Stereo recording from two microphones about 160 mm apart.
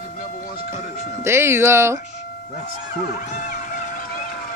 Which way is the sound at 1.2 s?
15° right (ahead or behind).